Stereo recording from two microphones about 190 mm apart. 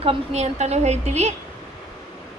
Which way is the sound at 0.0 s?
35° right (ahead or behind).